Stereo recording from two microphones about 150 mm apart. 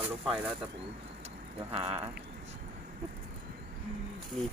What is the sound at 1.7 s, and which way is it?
Speech, 40° right (ahead or behind).